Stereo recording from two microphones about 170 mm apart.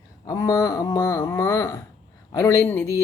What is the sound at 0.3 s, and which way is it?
Speech, 20° left (ahead or behind).